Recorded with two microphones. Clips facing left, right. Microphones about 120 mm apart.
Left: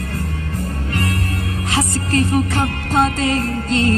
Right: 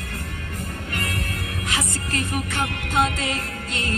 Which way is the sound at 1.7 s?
35° left (ahead or behind).